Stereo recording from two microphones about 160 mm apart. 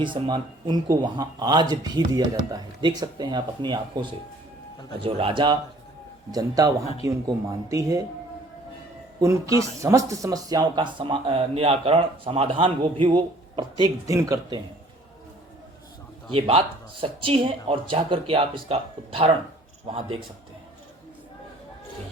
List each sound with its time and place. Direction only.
0.0 s speech: 30° right (ahead or behind)
9.2 s speech: 20° right (ahead or behind)
16.3 s speech: 35° right (ahead or behind)